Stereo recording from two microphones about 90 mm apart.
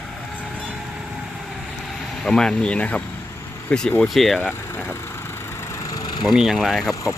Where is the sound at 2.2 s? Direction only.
5° left (ahead or behind).